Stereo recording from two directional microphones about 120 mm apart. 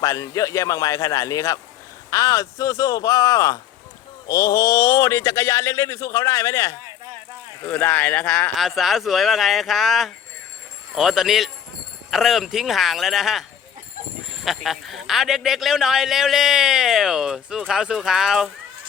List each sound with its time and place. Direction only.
0.0 s speech: 30° left (ahead or behind)
7.6 s speech: 15° left (ahead or behind)
8.5 s speech: centre (ahead or behind)
14.4 s speech: centre (ahead or behind)